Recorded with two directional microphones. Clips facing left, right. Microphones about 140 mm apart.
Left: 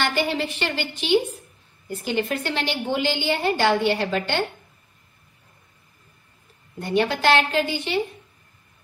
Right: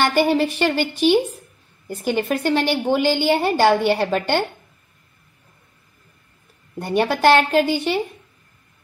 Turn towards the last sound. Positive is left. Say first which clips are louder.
# right 6 dB
turn(degrees=-45)  # may be behind; listen again after turning